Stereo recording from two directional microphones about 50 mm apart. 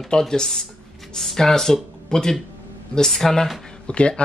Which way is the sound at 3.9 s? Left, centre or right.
Left.